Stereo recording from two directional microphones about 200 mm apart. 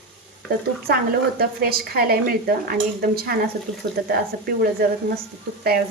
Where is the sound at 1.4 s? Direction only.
50° right (ahead or behind).